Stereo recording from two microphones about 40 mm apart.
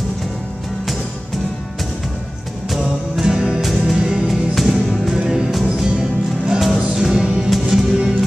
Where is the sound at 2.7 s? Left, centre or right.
Centre.